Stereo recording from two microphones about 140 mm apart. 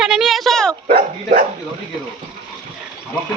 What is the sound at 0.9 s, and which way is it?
Speech, 90° right.